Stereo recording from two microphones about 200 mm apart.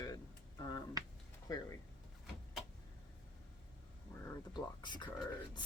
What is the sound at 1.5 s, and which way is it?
Speech, 20° left (ahead or behind).